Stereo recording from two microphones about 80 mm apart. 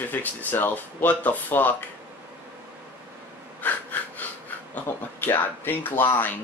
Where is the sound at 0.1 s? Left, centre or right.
Left.